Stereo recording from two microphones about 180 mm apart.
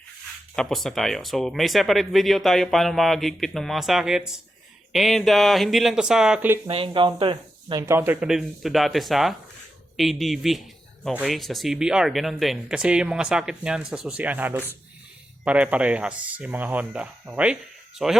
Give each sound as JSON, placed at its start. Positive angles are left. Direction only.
{"t": 0.5, "sound": "speech", "side_deg": 5}
{"t": 6.7, "sound": "speech", "side_deg": -30}
{"t": 7.8, "sound": "speech", "side_deg": -15}